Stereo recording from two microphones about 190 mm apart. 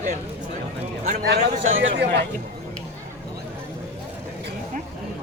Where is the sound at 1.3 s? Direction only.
85° right.